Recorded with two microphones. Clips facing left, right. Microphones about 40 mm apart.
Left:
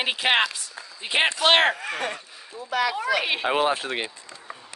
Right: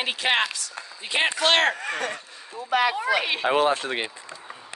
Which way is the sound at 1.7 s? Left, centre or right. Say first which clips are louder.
Right 1 dB; centre.